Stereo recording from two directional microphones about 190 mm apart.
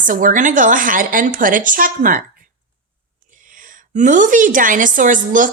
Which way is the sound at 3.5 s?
45° right (ahead or behind).